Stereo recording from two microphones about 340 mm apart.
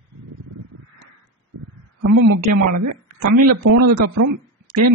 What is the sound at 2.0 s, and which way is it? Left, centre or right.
Speech, right.